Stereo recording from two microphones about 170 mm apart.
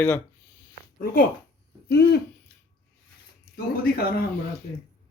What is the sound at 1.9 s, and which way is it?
Owl, 75° left (ahead or behind).